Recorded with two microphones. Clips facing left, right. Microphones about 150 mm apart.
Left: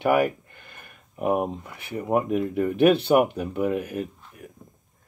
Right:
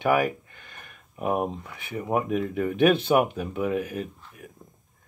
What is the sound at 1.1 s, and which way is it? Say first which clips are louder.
Speech: left 2 dB; centre (ahead or behind).